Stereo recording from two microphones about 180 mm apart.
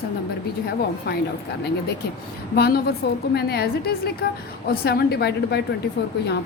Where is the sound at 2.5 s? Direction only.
60° left (ahead or behind).